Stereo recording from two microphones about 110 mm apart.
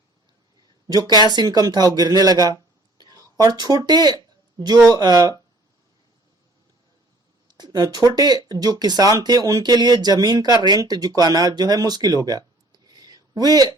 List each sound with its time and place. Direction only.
0.9 s speech: 35° right (ahead or behind)
3.0 s a sound: 35° right (ahead or behind)
4.9 s speech: 35° right (ahead or behind)
7.4 s speech: 40° right (ahead or behind)